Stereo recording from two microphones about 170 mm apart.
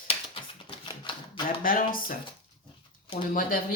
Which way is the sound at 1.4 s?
55° left (ahead or behind).